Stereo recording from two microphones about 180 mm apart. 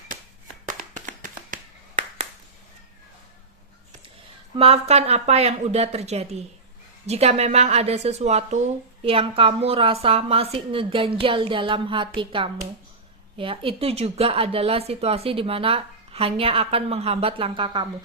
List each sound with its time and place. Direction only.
0.7 s hands: 45° right (ahead or behind)
4.5 s a woman's voice: 35° right (ahead or behind)